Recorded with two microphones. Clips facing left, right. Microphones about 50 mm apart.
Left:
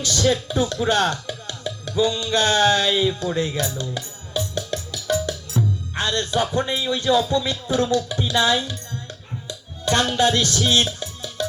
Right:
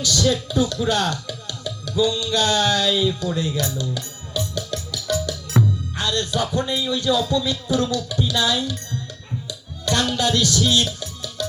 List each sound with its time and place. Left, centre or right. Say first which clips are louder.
0.0 s speech: even; left
5.5 s music: right 4 dB; right
5.9 s speech: left 1 dB; left
9.5 s music: left 2 dB; left